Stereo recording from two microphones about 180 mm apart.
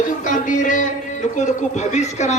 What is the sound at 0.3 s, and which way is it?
A man's voice, 45° left (ahead or behind).